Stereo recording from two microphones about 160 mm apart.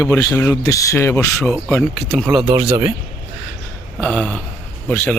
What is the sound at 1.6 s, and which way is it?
Speech, centre (ahead or behind).